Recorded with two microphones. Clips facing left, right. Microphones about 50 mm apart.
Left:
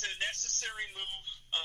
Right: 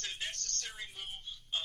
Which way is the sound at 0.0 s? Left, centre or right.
Left.